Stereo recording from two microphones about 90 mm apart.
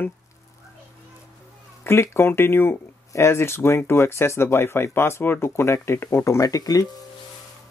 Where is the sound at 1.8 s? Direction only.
30° left (ahead or behind).